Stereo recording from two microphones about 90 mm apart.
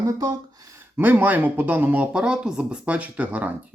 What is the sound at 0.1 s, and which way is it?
Speech, 45° right (ahead or behind).